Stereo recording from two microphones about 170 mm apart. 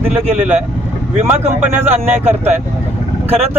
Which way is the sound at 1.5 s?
15° right (ahead or behind).